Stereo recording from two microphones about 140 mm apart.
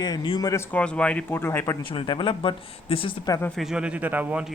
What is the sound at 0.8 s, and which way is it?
Speech, 5° left (ahead or behind).